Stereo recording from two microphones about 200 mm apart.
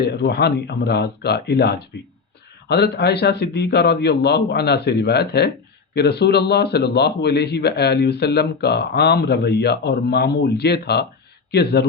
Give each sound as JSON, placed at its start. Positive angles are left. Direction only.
{"t": 0.0, "sound": "a man's voice", "side_deg": 55}